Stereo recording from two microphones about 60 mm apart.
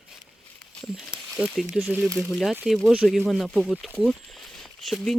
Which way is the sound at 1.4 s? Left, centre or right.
Right.